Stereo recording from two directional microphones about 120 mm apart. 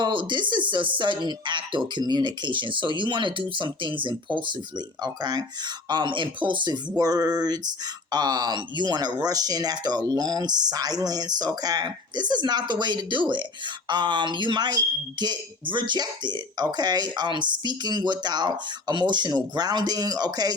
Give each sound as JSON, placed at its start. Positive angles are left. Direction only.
{"t": 0.0, "sound": "speech", "side_deg": -40}